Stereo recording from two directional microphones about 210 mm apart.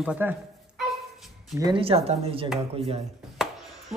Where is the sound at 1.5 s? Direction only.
20° right (ahead or behind).